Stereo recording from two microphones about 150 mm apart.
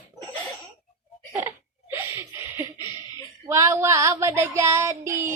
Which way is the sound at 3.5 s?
20° right (ahead or behind).